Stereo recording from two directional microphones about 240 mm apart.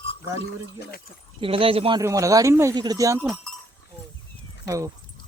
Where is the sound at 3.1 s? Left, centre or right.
Centre.